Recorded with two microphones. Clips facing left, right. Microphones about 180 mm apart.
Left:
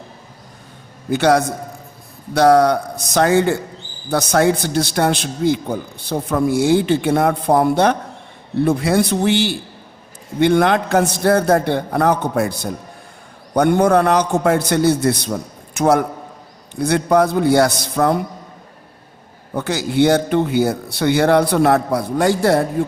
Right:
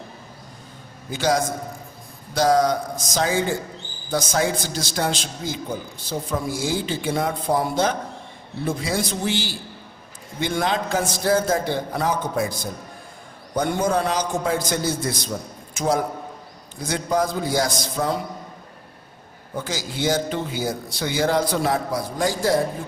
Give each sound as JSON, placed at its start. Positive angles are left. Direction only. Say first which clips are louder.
{"t": 1.1, "sound": "a man's voice", "louder": "left 7 dB", "side_deg": 65}
{"t": 19.5, "sound": "a man's voice", "louder": "left 11 dB", "side_deg": 65}